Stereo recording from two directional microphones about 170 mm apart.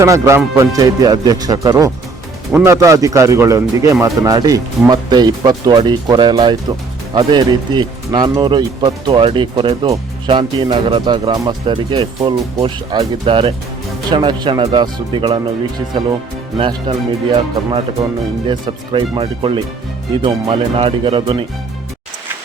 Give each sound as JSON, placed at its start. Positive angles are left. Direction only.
{"t": 0.0, "sound": "speech", "side_deg": -15}
{"t": 2.5, "sound": "speech", "side_deg": -10}
{"t": 2.7, "sound": "speech", "side_deg": -20}
{"t": 16.6, "sound": "speech", "side_deg": -30}